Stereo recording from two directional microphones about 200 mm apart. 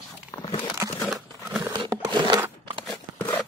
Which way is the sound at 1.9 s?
20° right (ahead or behind).